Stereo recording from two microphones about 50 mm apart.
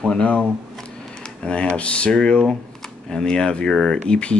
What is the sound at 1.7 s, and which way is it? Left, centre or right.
Speech, left.